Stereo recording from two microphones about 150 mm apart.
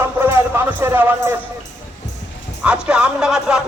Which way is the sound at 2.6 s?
5° right (ahead or behind).